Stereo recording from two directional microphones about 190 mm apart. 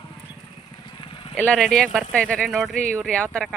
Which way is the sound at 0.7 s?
25° left (ahead or behind).